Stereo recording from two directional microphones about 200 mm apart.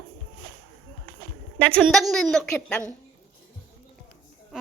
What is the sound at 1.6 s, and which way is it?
A woman's voice, 5° left (ahead or behind).